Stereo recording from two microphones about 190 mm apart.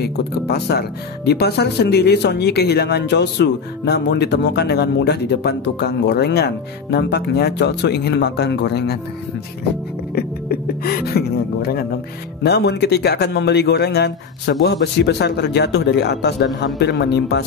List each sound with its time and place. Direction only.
0.0 s speech: 55° left (ahead or behind)
10.1 s speech: 55° left (ahead or behind)